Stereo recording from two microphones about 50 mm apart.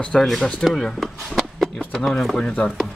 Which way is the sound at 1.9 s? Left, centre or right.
Centre.